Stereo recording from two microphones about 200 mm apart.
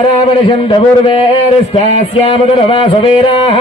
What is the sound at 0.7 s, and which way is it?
Music, 25° left (ahead or behind).